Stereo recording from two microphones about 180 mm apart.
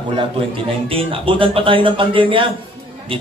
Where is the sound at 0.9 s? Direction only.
30° right (ahead or behind).